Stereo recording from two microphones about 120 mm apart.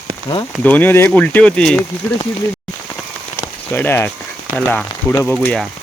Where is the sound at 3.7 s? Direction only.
20° left (ahead or behind).